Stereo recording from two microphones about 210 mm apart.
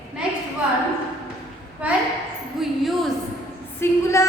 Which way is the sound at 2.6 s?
Centre (ahead or behind).